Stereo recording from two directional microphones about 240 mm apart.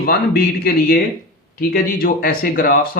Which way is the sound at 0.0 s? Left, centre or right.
Left.